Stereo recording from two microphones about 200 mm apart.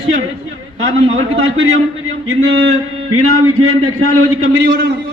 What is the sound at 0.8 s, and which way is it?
A man's voice, 85° right.